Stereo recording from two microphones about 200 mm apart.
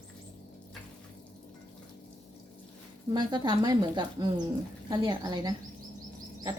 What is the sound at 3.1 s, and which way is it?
Speech, 20° right (ahead or behind).